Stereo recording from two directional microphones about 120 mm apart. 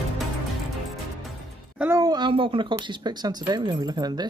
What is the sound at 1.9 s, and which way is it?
Speech, 35° right (ahead or behind).